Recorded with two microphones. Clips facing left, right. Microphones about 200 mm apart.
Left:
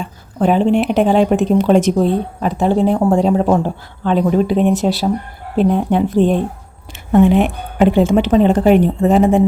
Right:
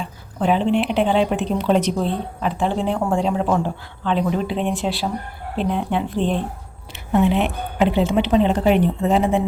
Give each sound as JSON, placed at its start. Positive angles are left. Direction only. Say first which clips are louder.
{"t": 0.0, "sound": "a woman's voice", "louder": "left 6 dB", "side_deg": 45}